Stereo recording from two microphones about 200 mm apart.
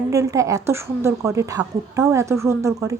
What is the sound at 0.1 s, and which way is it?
A woman's voice, 15° right (ahead or behind).